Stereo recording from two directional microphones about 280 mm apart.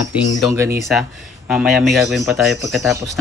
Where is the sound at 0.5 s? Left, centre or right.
Centre.